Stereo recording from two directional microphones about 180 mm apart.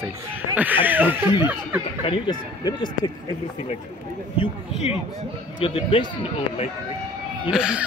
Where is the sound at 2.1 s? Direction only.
25° left (ahead or behind).